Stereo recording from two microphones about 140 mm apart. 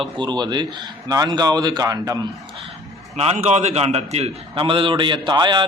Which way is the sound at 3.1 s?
50° right (ahead or behind).